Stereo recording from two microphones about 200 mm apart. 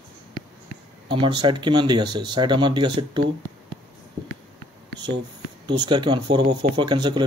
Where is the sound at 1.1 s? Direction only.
25° right (ahead or behind).